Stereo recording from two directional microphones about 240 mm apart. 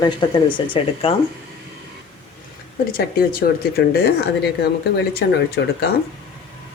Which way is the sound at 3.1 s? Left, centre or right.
Left.